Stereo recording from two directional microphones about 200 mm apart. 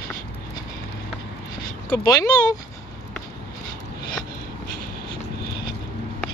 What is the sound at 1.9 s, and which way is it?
Speech, 20° left (ahead or behind).